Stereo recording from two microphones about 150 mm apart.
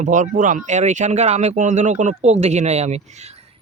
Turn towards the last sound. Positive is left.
turn(degrees=-45)  # may be behind; listen again after turning